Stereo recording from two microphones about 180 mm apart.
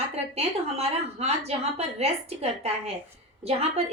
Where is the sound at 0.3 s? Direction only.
35° right (ahead or behind).